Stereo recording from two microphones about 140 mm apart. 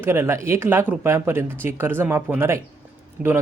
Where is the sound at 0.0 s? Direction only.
20° right (ahead or behind).